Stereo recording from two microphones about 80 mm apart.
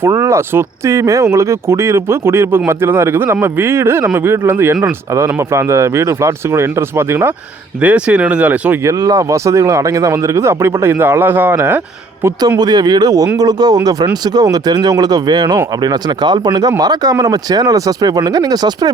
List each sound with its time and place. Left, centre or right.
0.0 s speech: right
7.8 s speech: centre
8.8 s speech: right
12.4 s speech: right